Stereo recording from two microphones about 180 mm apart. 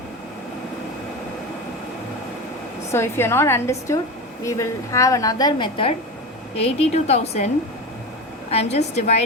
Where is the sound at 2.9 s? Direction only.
15° left (ahead or behind); by 7.4 s 35° left (ahead or behind).